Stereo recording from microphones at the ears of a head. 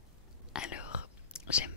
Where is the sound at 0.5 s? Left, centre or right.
Left.